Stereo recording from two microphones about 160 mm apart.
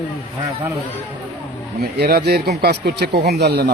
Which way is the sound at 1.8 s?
75° right (ahead or behind).